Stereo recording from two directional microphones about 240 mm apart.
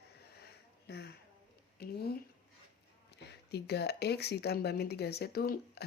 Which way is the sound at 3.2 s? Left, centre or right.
Left.